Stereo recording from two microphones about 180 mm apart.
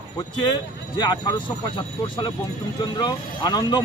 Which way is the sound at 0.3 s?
25° left (ahead or behind).